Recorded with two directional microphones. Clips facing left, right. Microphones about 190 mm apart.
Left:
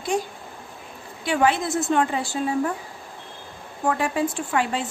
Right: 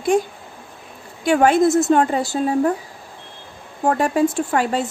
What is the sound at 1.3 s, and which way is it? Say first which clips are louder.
A woman's voice: right 7 dB; 45° right (ahead or behind).